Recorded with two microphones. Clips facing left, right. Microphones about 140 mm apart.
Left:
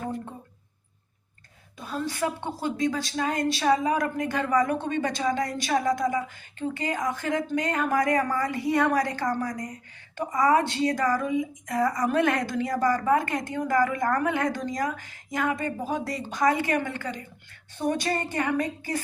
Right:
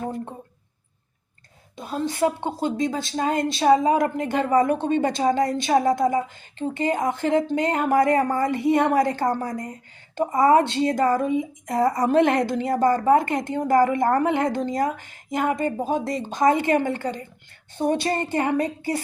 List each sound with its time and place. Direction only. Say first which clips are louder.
1.8 s a woman's voice: right 6 dB; 25° right (ahead or behind)